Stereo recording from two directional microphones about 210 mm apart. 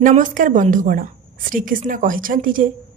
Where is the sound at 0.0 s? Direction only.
40° right (ahead or behind).